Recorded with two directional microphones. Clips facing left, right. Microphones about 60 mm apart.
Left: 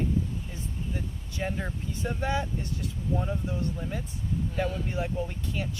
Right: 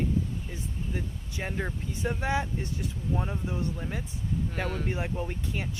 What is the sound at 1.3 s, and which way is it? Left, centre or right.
Speech, centre.